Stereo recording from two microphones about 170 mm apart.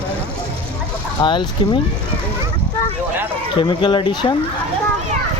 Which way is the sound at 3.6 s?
30° left (ahead or behind).